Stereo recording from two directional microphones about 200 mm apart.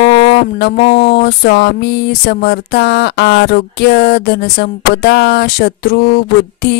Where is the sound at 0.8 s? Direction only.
25° left (ahead or behind).